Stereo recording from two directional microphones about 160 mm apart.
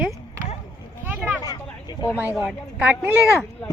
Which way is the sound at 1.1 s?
10° right (ahead or behind).